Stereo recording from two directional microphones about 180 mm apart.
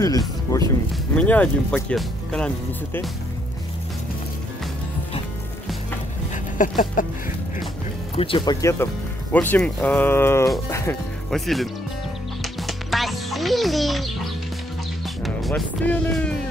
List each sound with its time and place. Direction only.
0.5 s speech: 20° left (ahead or behind)
1.1 s speech: 10° left (ahead or behind)
6.6 s a sound: 45° left (ahead or behind)
8.2 s speech: 30° left (ahead or behind)
11.2 s speech: centre (ahead or behind)
12.4 s music: centre (ahead or behind)
15.2 s speech: centre (ahead or behind)